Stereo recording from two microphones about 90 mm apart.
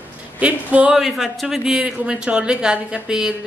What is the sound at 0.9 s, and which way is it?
Speech, centre (ahead or behind).